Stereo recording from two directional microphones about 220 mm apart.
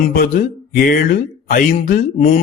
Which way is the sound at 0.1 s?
40° left (ahead or behind).